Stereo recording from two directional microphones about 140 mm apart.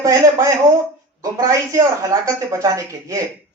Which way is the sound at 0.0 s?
20° right (ahead or behind).